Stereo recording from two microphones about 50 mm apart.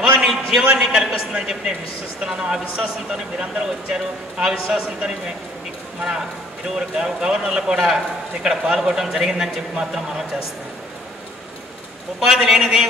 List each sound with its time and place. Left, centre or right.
0.3 s a man's voice: centre
12.2 s a man's voice: centre